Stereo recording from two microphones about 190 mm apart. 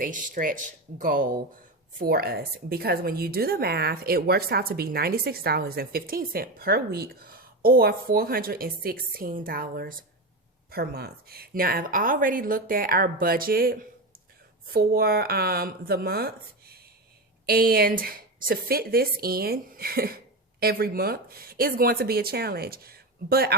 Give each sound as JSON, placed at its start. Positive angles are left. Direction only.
{"t": 0.0, "sound": "speech", "side_deg": -45}